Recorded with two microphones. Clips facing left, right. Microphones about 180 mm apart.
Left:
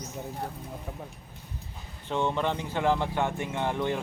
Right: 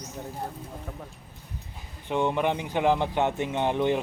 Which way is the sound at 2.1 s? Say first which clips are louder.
Right 3 dB; 15° right (ahead or behind).